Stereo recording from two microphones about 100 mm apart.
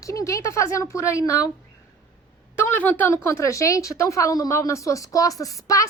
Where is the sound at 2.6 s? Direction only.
20° left (ahead or behind).